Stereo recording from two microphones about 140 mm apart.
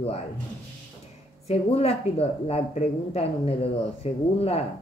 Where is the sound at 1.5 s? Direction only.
50° left (ahead or behind).